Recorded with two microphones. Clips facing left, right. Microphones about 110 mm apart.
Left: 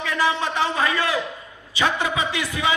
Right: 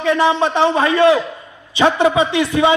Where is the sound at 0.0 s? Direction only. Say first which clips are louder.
Right 8 dB; 25° right (ahead or behind).